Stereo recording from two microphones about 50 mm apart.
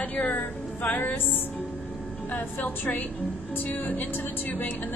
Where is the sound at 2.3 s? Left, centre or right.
Left.